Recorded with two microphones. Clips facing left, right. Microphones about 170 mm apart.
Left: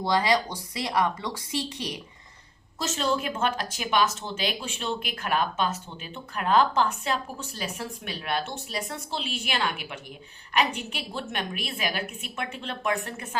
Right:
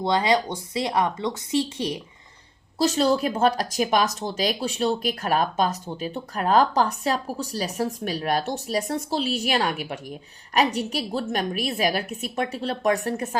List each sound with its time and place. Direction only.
0.0 s a woman's voice: 25° right (ahead or behind); by 13.4 s 40° right (ahead or behind)